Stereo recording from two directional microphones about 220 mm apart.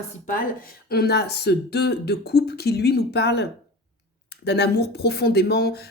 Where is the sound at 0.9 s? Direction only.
45° left (ahead or behind).